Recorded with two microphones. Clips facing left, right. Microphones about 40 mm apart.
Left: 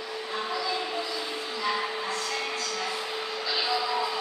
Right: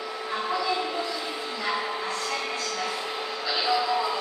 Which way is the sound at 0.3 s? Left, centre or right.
Centre.